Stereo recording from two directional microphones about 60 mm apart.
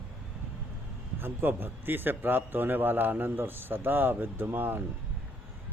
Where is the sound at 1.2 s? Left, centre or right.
Right.